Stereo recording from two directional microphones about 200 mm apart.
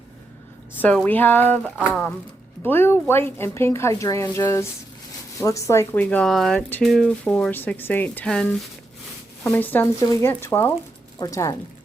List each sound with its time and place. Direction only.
0.8 s speech: 10° left (ahead or behind)
1.6 s speech: 10° right (ahead or behind)
2.6 s speech: 10° left (ahead or behind)